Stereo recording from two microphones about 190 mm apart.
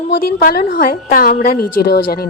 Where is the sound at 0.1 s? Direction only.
50° left (ahead or behind).